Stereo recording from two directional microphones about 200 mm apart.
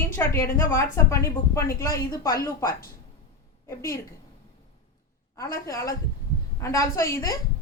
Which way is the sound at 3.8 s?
15° left (ahead or behind).